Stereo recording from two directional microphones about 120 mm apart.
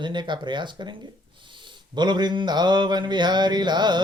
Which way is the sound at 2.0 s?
35° right (ahead or behind).